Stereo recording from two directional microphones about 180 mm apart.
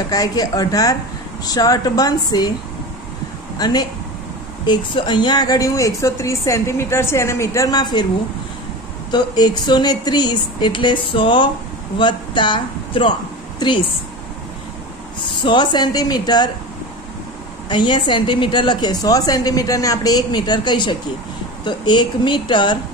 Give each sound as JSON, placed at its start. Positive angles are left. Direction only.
{"t": 0.1, "sound": "a woman's voice", "side_deg": 20}
{"t": 3.5, "sound": "speech", "side_deg": 20}
{"t": 9.1, "sound": "a woman's voice", "side_deg": 25}
{"t": 15.4, "sound": "a woman's voice", "side_deg": 25}
{"t": 17.6, "sound": "a woman's voice", "side_deg": 25}